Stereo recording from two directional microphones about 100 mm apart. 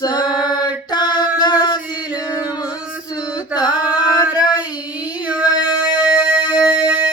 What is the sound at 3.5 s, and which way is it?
Singing, 10° right (ahead or behind).